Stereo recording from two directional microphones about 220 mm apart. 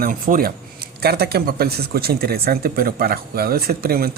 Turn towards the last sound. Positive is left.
turn(degrees=-45)  # may be behind; listen again after turning